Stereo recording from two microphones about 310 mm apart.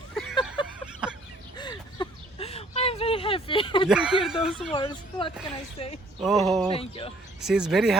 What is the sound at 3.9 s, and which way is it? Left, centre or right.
Speech, centre.